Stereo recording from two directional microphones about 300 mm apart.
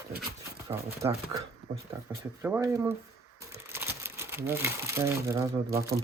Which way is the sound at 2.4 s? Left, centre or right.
Centre.